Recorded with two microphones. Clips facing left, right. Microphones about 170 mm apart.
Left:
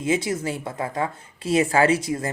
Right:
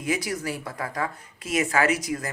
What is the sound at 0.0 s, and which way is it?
Speech, 25° left (ahead or behind).